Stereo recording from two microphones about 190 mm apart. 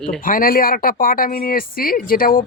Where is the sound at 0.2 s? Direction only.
45° left (ahead or behind).